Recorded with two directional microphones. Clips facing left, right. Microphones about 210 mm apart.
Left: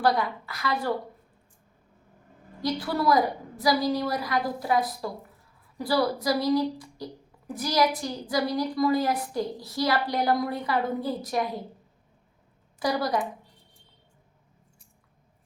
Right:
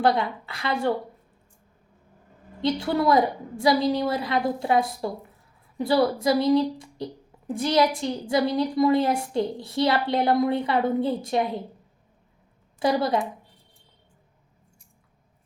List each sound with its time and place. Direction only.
0.0 s a woman's voice: 25° right (ahead or behind)
2.6 s a woman's voice: 25° right (ahead or behind)
12.8 s a woman's voice: 25° right (ahead or behind)